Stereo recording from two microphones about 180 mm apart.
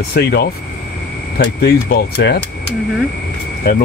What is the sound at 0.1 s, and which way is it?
Speech, 60° left (ahead or behind).